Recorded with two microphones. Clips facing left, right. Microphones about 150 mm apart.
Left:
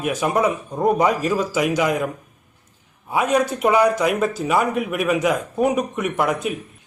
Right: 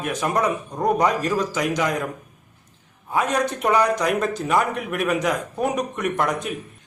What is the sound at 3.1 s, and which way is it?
Speech, 10° left (ahead or behind).